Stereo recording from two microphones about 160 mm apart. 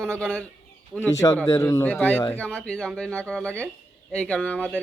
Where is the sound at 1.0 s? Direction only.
20° left (ahead or behind).